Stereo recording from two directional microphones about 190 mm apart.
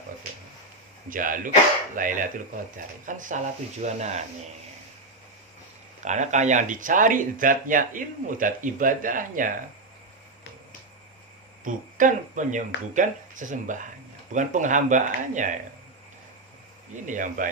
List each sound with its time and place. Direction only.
1.1 s speech: 45° right (ahead or behind)
6.1 s speech: 40° right (ahead or behind)
11.6 s speech: 45° right (ahead or behind)
17.1 s speech: 40° right (ahead or behind)